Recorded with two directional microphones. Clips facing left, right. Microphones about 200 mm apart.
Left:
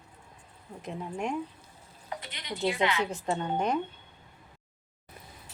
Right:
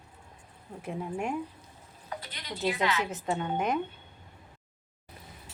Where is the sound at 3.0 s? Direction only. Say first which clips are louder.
Left 1 dB; 5° right (ahead or behind).